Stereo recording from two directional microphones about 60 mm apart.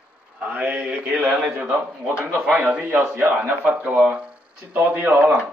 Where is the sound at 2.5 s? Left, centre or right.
Right.